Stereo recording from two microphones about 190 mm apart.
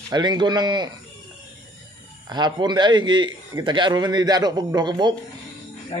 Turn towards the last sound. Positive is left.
turn(degrees=35)  # may be behind; listen again after turning